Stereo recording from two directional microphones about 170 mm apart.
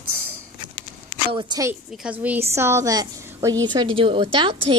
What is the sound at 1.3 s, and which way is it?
Speech, 25° right (ahead or behind).